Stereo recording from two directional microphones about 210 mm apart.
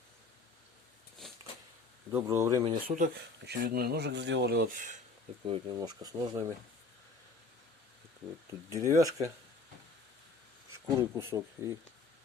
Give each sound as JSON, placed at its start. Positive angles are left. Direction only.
{"t": 2.1, "sound": "speech", "side_deg": -15}
{"t": 2.8, "sound": "speech", "side_deg": -40}
{"t": 3.2, "sound": "speech", "side_deg": -50}
{"t": 5.5, "sound": "speech", "side_deg": -20}
{"t": 8.7, "sound": "speech", "side_deg": -15}
{"t": 10.7, "sound": "speech", "side_deg": -15}